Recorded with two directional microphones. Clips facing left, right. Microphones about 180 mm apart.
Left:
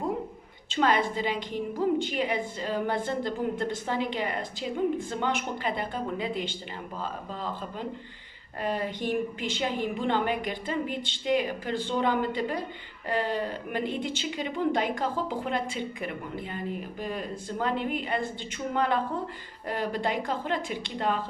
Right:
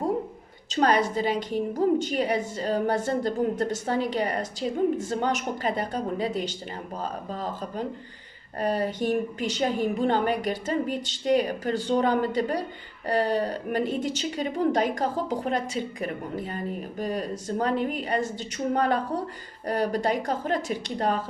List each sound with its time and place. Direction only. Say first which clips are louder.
0.7 s a woman's voice: right 3 dB; 40° right (ahead or behind)